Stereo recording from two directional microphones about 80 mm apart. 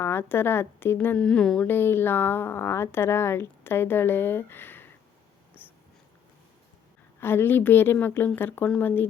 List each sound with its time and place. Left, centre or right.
0.0 s speech: left
1.2 s speech: centre
1.6 s speech: left
5.6 s wheeze: left
7.2 s speech: left